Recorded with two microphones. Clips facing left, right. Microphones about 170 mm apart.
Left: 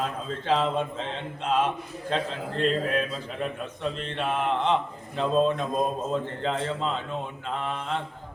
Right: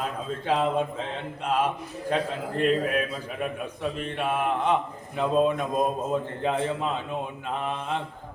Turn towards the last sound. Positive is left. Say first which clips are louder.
# right 1 dB
turn(degrees=-15)  # may be behind; listen again after turning